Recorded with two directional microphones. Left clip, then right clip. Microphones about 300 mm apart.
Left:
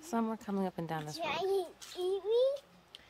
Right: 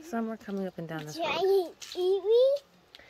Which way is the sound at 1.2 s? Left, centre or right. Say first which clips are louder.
Right 8 dB; right.